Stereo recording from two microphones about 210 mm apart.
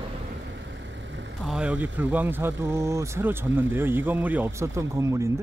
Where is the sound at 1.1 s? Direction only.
60° right (ahead or behind).